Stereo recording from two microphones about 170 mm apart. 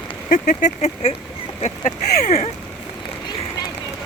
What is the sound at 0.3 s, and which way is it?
Speech, 50° left (ahead or behind).